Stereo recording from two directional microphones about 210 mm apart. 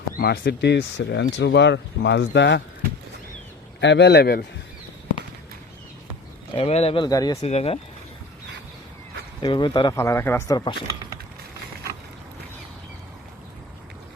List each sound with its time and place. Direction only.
0.2 s speech: 50° left (ahead or behind)
3.8 s speech: 55° left (ahead or behind)
6.5 s speech: 25° left (ahead or behind)
7.4 s speech: 30° left (ahead or behind)
9.4 s speech: 20° left (ahead or behind)